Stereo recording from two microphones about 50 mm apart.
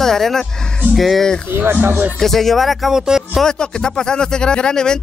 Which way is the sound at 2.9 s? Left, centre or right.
Centre.